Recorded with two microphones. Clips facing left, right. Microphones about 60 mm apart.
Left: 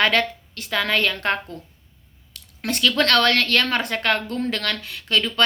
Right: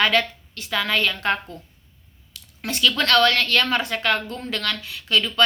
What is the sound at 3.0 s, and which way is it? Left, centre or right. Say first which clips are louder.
A woman's voice: even; left.